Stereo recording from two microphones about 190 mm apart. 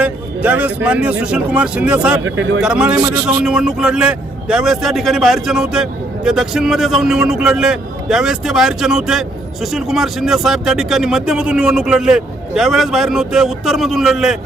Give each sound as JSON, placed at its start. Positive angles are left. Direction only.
{"t": 0.0, "sound": "speech", "side_deg": -5}
{"t": 2.2, "sound": "speech", "side_deg": -90}
{"t": 2.6, "sound": "speech", "side_deg": -5}
{"t": 3.0, "sound": "a man's voice", "side_deg": -20}
{"t": 3.2, "sound": "speech", "side_deg": -5}